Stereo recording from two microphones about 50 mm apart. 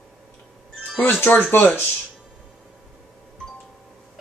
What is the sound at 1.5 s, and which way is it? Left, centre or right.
Speech, left.